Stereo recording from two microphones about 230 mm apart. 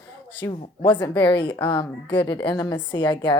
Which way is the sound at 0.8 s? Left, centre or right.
Left.